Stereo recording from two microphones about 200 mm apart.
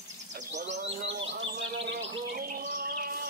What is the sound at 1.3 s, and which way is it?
Bird, 65° right (ahead or behind).